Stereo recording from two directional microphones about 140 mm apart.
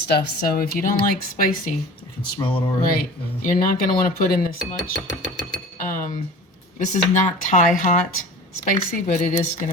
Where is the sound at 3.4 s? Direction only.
85° left.